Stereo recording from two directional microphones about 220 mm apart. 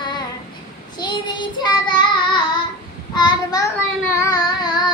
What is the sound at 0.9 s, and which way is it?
Child singing, 20° left (ahead or behind).